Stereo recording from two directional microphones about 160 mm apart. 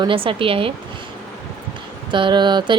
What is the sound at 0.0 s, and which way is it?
Speech, 35° right (ahead or behind).